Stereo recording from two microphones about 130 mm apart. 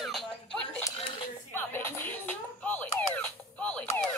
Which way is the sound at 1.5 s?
15° left (ahead or behind).